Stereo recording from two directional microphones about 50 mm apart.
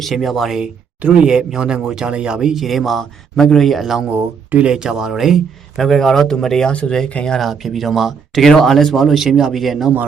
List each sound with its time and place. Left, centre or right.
0.0 s speech: centre
1.0 s speech: right
1.3 s speech: centre
7.3 s speech: centre
8.4 s speech: centre